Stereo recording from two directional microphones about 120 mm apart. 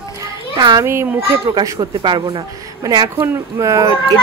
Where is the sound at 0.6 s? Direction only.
35° right (ahead or behind).